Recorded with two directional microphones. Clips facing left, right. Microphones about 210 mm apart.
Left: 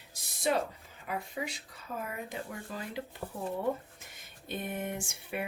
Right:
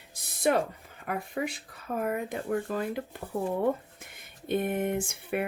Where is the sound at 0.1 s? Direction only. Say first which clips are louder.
Right 5 dB; 55° right (ahead or behind).